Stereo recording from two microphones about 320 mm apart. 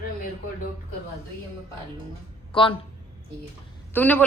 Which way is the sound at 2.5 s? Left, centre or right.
Centre.